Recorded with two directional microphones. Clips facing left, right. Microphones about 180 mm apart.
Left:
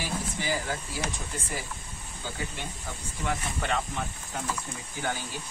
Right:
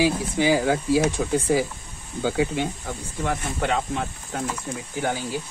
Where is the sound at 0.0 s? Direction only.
85° right.